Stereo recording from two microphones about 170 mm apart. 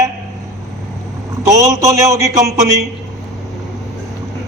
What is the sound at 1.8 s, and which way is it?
Speech, 20° right (ahead or behind).